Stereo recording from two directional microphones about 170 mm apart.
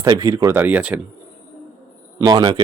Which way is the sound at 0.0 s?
20° right (ahead or behind).